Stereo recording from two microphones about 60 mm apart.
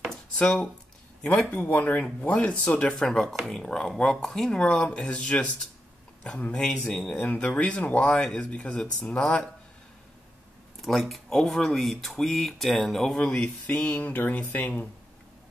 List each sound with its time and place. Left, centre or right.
0.0 s a sound: centre
1.2 s speech: left
2.9 s speech: centre
6.5 s speech: centre
10.8 s speech: centre
13.4 s speech: left